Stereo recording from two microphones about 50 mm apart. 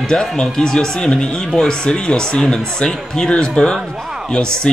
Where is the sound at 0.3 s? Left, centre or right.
Centre.